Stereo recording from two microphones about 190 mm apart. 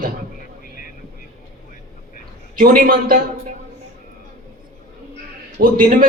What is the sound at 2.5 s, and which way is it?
Speech, 50° right (ahead or behind).